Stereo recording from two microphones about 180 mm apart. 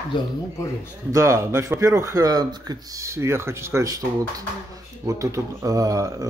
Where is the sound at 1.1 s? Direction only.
15° right (ahead or behind).